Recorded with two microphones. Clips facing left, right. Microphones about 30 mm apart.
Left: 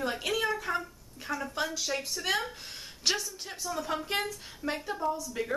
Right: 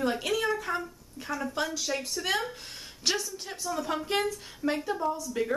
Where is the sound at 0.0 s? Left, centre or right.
Centre.